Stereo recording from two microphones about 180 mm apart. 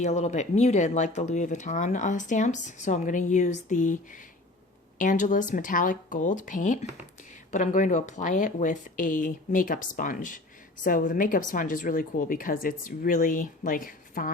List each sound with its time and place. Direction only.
0.0 s speech: 40° left (ahead or behind)